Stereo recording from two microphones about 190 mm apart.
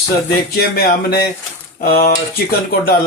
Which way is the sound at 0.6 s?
55° left (ahead or behind).